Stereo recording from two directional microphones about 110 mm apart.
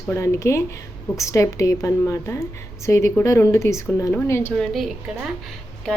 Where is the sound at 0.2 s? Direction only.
25° left (ahead or behind).